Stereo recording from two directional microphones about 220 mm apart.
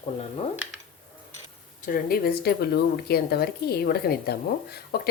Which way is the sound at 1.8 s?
40° left (ahead or behind).